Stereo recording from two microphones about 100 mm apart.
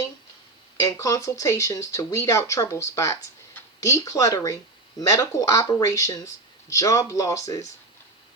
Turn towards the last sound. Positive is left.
turn(degrees=35)  # may be behind; listen again after turning